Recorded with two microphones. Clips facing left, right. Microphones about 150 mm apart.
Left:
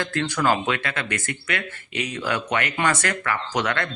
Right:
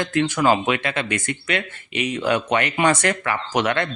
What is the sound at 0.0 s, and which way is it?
Speech, 20° right (ahead or behind).